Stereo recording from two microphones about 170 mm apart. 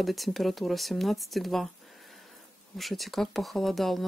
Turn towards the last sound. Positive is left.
turn(degrees=0)  # may be behind; listen again after turning